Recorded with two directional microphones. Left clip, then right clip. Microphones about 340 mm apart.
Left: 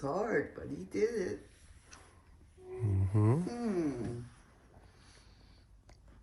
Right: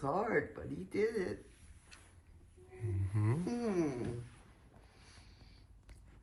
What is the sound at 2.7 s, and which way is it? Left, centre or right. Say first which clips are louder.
Music: left 7 dB; centre.